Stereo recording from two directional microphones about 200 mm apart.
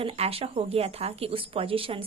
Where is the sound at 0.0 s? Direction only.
30° right (ahead or behind).